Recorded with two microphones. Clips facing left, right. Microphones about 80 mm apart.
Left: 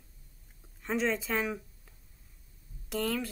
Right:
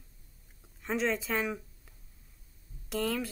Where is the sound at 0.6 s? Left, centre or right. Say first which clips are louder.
Even; centre.